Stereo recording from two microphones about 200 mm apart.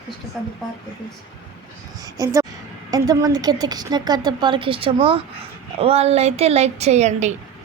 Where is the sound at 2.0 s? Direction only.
15° right (ahead or behind).